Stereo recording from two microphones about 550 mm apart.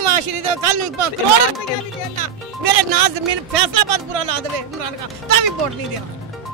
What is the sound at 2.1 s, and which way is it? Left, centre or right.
Speech, right.